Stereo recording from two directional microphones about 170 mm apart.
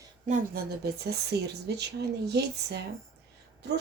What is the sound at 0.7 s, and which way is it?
Speech, 70° right (ahead or behind).